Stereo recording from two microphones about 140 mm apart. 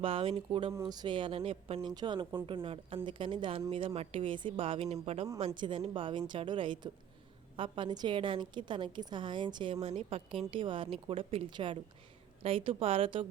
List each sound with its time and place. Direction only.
0.0 s a woman's voice: 40° right (ahead or behind)
0.7 s a woman's voice: 25° right (ahead or behind); by 1.8 s 40° right (ahead or behind)
1.9 s a woman's voice: 30° right (ahead or behind); by 5.3 s 50° right (ahead or behind)
5.5 s a woman's voice: 35° right (ahead or behind)